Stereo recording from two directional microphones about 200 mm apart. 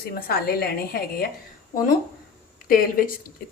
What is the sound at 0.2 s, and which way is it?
Speech, 50° left (ahead or behind).